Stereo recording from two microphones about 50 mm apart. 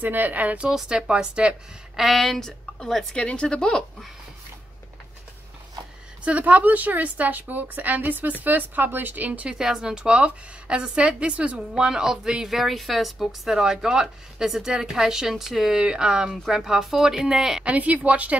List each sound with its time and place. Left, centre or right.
0.0 s a woman's voice: right
0.7 s speech: centre
2.0 s a woman's voice: centre
3.2 s speech: left
6.2 s a woman's voice: right
9.5 s a woman's voice: centre
12.4 s speech: centre
17.6 s a woman's voice: right